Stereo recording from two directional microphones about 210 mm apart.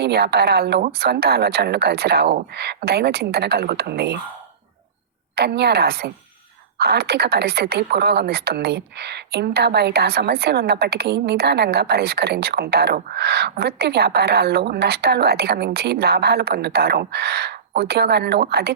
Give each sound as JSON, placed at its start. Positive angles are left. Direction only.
{"t": 0.0, "sound": "a woman's voice", "side_deg": -50}
{"t": 5.3, "sound": "a woman's voice", "side_deg": -50}